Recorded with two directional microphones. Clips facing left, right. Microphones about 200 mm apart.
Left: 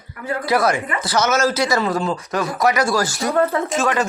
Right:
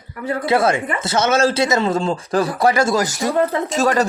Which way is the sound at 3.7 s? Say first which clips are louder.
Right 5 dB; 40° right (ahead or behind).